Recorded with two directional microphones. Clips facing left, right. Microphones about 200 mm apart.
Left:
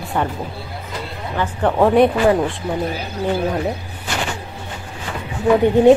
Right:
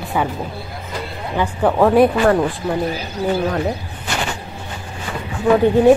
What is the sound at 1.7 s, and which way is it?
Speech, centre (ahead or behind).